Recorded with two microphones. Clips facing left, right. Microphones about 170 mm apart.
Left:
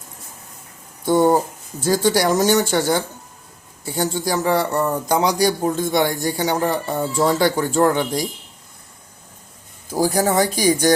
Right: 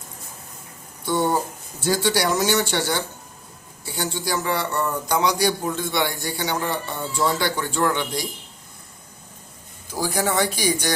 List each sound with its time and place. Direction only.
1.0 s speech: 45° left (ahead or behind)
9.9 s speech: 40° left (ahead or behind)